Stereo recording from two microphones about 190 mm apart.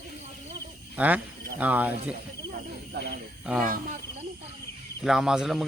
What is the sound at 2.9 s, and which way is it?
Speech, 60° right (ahead or behind).